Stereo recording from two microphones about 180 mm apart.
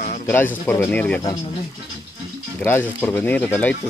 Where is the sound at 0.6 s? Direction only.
10° left (ahead or behind).